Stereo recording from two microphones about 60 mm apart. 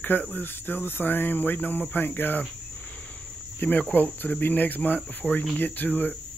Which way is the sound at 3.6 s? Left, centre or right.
Left.